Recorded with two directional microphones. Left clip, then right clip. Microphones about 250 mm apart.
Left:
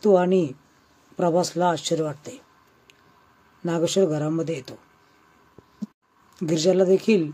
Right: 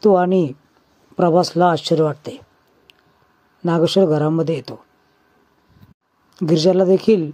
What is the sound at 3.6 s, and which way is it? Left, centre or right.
Speech, right.